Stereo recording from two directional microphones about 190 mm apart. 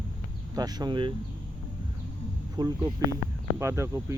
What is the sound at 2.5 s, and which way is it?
Speech, 20° right (ahead or behind).